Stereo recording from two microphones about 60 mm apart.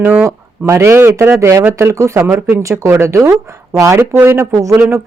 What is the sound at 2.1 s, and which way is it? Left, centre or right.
Speech, right.